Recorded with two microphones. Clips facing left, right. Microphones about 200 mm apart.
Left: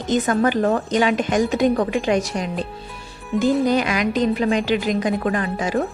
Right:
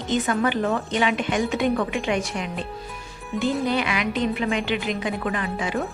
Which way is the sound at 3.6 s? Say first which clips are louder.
Left 5 dB; 40° left (ahead or behind).